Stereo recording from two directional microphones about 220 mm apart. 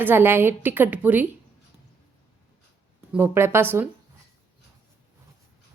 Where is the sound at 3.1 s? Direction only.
10° right (ahead or behind).